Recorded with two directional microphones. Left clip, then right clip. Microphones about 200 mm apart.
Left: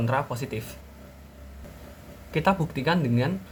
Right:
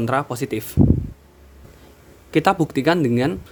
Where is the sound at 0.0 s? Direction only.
50° right (ahead or behind).